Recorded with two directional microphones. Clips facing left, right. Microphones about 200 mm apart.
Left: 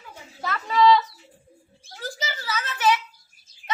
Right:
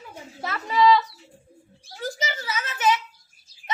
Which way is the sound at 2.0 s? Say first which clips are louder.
Right 3 dB; 20° right (ahead or behind).